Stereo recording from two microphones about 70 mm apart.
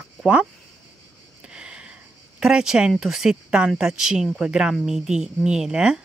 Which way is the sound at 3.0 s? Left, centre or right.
Centre.